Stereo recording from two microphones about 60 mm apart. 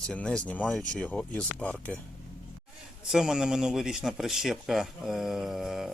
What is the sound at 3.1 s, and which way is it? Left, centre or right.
Speech, centre.